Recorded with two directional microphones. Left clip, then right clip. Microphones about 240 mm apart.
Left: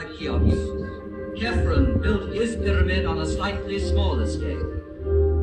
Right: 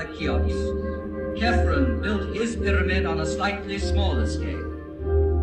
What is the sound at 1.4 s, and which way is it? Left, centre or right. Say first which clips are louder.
A man's voice: right 2 dB; right.